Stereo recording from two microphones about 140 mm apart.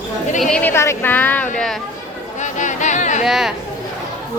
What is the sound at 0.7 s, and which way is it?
Speech, 20° left (ahead or behind).